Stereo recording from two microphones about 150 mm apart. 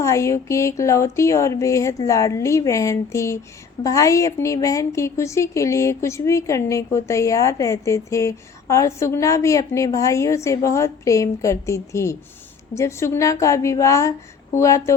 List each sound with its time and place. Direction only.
0.0 s a woman's voice: 20° left (ahead or behind)